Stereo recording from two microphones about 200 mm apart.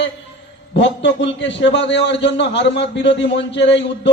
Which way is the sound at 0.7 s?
60° left (ahead or behind).